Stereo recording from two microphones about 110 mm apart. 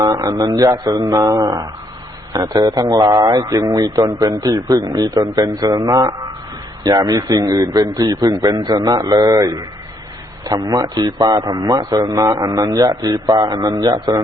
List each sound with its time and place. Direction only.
0.0 s speech: 35° right (ahead or behind)